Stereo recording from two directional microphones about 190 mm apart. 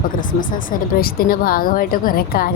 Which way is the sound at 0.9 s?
50° left (ahead or behind).